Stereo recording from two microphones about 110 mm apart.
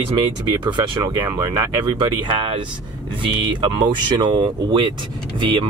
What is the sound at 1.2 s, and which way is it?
Speech, 25° right (ahead or behind).